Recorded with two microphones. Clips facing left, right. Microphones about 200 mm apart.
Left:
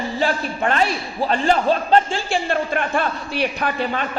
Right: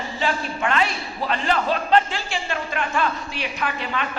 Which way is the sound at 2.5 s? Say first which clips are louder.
Left 3 dB; 50° left (ahead or behind).